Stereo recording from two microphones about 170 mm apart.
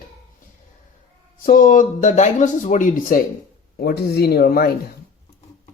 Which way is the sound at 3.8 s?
70° left (ahead or behind).